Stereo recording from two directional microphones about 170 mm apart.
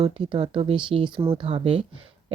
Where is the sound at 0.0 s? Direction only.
30° right (ahead or behind).